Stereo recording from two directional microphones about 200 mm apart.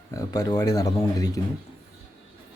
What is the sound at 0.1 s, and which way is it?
Speech, 15° left (ahead or behind).